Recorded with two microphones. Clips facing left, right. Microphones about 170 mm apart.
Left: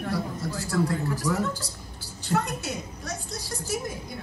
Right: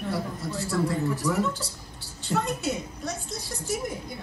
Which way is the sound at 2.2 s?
20° right (ahead or behind).